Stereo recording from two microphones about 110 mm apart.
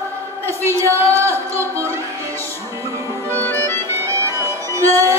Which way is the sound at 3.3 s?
20° left (ahead or behind).